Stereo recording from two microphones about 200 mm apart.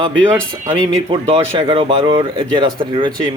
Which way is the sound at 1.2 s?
25° right (ahead or behind).